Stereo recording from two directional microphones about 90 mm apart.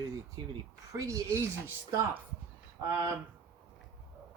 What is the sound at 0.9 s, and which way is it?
Speech, 40° right (ahead or behind).